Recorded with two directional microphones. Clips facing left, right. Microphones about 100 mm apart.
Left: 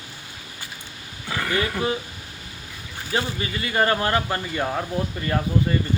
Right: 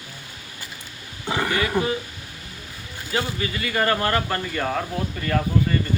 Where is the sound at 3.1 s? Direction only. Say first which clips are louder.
Even; 25° left (ahead or behind).